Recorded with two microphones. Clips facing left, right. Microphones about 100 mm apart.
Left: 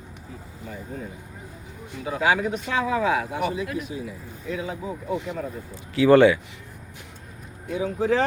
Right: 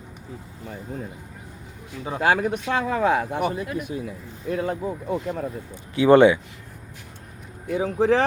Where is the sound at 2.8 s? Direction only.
45° right (ahead or behind).